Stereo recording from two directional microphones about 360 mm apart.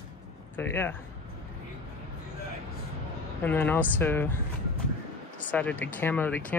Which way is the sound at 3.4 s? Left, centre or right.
Centre.